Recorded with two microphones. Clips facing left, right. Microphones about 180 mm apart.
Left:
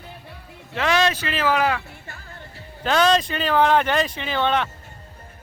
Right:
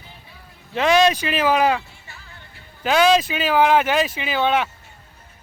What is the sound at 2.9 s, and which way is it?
Speech, 10° right (ahead or behind).